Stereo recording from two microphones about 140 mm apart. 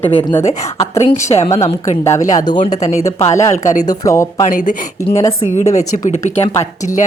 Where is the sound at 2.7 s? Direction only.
55° left (ahead or behind).